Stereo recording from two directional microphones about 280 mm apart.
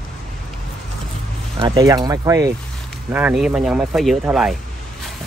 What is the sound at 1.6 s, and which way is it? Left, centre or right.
Speech, centre.